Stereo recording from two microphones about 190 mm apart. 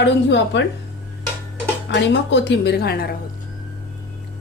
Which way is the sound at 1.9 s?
70° left (ahead or behind).